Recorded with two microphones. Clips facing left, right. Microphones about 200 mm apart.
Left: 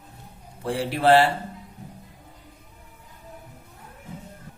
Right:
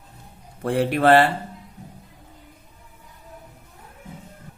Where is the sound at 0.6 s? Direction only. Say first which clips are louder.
Right 4 dB; 55° right (ahead or behind).